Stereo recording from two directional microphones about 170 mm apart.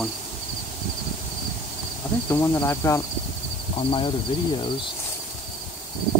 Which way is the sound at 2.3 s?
15° left (ahead or behind).